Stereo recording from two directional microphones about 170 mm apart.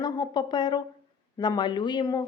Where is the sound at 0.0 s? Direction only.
25° left (ahead or behind).